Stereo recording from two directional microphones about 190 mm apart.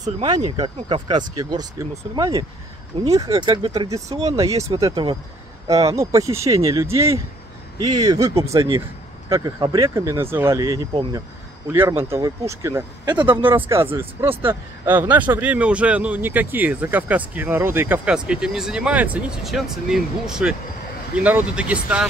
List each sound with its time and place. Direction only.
0.0 s a man's voice: 20° right (ahead or behind)
11.7 s a man's voice: 10° right (ahead or behind)
13.4 s a man's voice: 10° right (ahead or behind)